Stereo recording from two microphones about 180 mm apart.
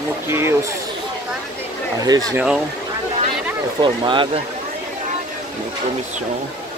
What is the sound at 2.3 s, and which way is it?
Speech, 5° right (ahead or behind).